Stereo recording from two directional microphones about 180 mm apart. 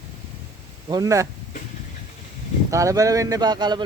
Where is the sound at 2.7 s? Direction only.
15° right (ahead or behind).